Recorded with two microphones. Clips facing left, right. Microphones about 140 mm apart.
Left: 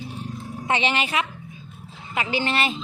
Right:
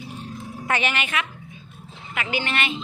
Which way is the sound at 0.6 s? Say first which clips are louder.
Left 2 dB; 25° left (ahead or behind).